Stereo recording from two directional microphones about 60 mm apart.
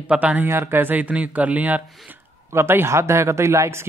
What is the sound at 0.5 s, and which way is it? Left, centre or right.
Speech, right.